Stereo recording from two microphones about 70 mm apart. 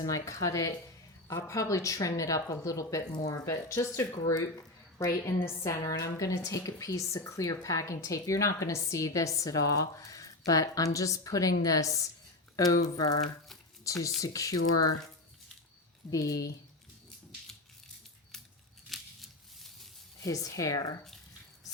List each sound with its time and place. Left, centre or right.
0.0 s a woman's voice: left
16.0 s speech: left
18.9 s scissors: centre
20.2 s speech: left